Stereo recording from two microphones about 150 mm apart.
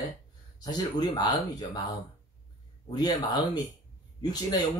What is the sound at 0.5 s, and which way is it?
Speech, 25° left (ahead or behind).